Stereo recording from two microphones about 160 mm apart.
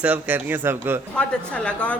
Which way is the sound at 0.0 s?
10° right (ahead or behind).